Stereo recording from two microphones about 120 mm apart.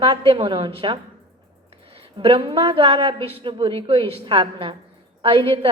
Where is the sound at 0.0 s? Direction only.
50° right (ahead or behind).